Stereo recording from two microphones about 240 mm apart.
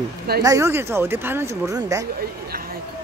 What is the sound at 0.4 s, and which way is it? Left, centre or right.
Speech, centre.